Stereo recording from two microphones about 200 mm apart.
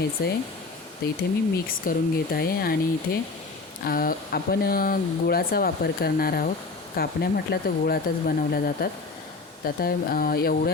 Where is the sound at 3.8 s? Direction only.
45° left (ahead or behind).